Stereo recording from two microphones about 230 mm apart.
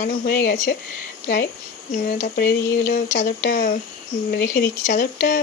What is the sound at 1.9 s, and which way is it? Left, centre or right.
Speech, left.